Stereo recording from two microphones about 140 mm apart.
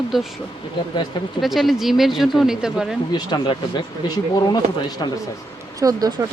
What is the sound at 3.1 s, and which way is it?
Speech, 35° left (ahead or behind).